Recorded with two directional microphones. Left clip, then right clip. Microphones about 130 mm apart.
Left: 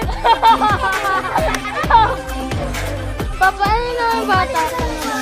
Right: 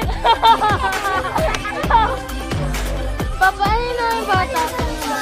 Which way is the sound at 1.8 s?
55° left (ahead or behind).